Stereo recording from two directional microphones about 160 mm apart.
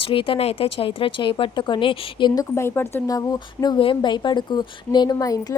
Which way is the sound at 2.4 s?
15° left (ahead or behind).